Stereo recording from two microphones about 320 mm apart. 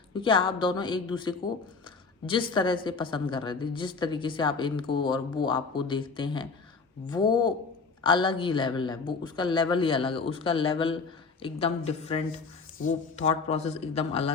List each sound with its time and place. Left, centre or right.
0.1 s a woman's voice: centre